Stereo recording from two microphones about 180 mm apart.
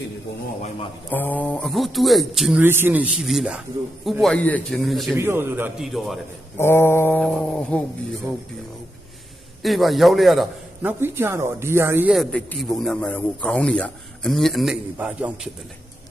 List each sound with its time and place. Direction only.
1.1 s a man's voice: 10° left (ahead or behind)
5.1 s speech: 10° right (ahead or behind)
5.8 s a man's voice: centre (ahead or behind)
6.6 s mantra: 15° left (ahead or behind)
9.6 s a man's voice: centre (ahead or behind)
10.8 s speech: 15° right (ahead or behind)
12.1 s a man's voice: 5° left (ahead or behind)